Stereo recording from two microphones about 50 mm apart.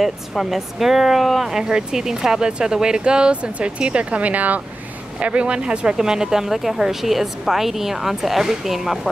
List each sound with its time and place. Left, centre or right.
0.3 s a woman's voice: centre